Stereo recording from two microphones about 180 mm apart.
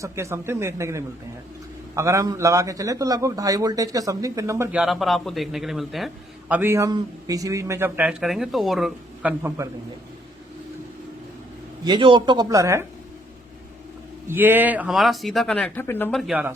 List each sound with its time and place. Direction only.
0.0 s speech: 15° right (ahead or behind)
4.8 s speech: centre (ahead or behind)
6.5 s speech: 10° right (ahead or behind)
9.6 s speech: 15° right (ahead or behind)
11.9 s speech: 25° right (ahead or behind)
14.3 s speech: 10° right (ahead or behind); by 16.2 s 10° left (ahead or behind)
16.2 s speech: 5° right (ahead or behind)